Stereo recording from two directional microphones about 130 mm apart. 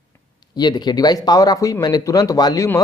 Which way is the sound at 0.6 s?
35° left (ahead or behind).